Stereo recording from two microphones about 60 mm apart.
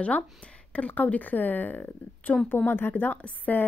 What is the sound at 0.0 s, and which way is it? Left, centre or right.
A woman's voice, left.